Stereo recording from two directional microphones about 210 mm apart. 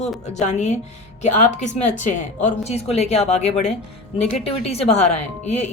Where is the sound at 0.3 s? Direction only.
35° left (ahead or behind).